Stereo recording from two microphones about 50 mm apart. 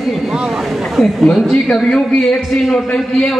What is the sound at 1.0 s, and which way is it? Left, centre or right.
A man's voice, centre.